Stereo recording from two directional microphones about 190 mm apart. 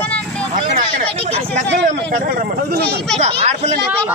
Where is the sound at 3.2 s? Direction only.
35° right (ahead or behind).